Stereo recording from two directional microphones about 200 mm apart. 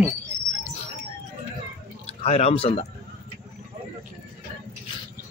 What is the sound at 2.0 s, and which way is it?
Speech, 30° left (ahead or behind).